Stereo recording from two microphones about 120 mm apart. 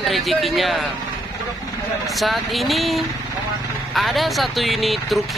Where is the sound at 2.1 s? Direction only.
Centre (ahead or behind).